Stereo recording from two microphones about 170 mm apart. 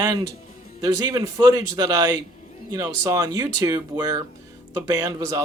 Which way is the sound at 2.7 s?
20° right (ahead or behind).